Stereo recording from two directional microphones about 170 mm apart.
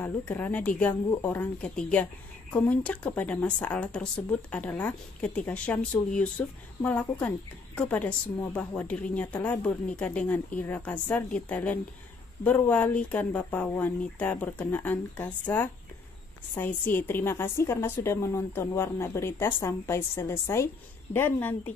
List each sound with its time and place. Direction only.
0.0 s speech: 10° left (ahead or behind)